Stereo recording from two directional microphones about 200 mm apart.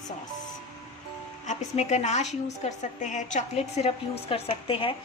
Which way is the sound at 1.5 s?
35° left (ahead or behind).